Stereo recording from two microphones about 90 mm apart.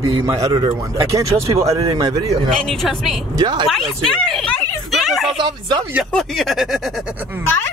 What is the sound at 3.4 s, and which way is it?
Speech, 55° right (ahead or behind).